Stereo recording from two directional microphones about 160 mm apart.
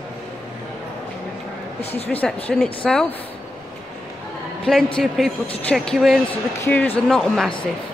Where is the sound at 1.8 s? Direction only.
40° left (ahead or behind).